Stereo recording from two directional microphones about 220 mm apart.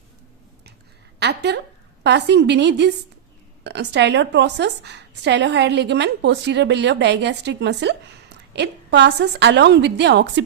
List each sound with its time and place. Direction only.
1.2 s a woman's voice: 50° right (ahead or behind)